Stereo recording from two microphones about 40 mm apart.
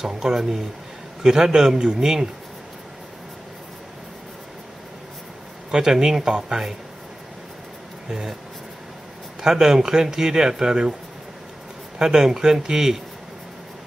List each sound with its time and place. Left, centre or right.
0.0 s speech: centre
5.7 s speech: centre
8.1 s speech: centre
9.4 s speech: centre
12.0 s speech: centre